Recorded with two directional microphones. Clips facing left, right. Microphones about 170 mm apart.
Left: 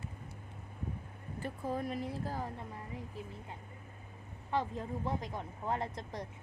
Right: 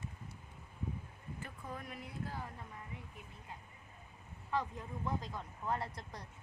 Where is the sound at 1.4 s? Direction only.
30° left (ahead or behind).